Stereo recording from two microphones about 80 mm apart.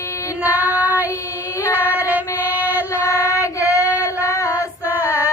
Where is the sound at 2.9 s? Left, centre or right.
Left.